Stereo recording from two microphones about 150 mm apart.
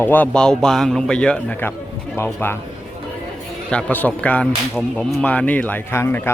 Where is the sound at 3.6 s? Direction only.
5° left (ahead or behind).